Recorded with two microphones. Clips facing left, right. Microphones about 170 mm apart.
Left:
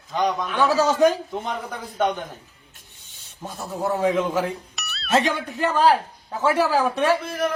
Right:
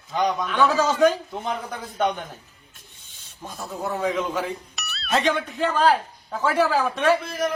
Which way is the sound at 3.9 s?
15° left (ahead or behind).